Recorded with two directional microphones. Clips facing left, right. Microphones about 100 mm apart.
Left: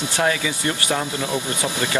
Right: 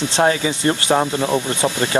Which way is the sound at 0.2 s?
35° right (ahead or behind).